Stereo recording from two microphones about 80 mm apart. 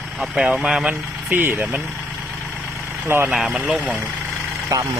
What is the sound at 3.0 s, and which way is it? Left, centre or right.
Speech, right.